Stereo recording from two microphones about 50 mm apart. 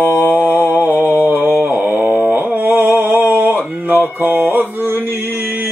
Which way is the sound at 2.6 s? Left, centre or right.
Right.